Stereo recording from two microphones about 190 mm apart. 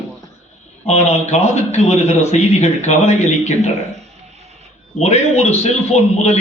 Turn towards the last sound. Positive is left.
turn(degrees=35)  # may be behind; listen again after turning